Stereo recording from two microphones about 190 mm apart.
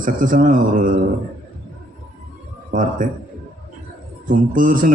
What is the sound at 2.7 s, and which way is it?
Speech, 45° right (ahead or behind).